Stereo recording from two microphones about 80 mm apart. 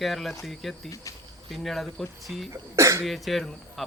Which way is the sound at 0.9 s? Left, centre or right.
Left.